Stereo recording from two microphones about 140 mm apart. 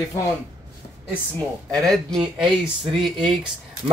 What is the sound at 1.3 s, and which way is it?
Speech, 5° left (ahead or behind).